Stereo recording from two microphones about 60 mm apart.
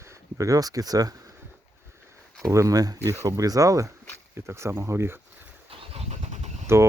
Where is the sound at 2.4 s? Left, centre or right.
Right.